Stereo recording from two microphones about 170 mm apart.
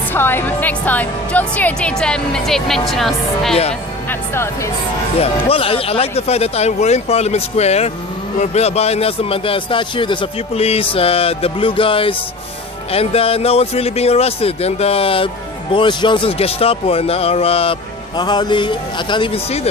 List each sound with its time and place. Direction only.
0.1 s a woman's voice: 10° left (ahead or behind)
3.5 s speech: 35° left (ahead or behind)
4.1 s speech: 15° left (ahead or behind)
5.2 s a man's voice: 35° left (ahead or behind)